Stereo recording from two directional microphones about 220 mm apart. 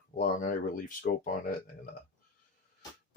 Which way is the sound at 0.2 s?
40° left (ahead or behind).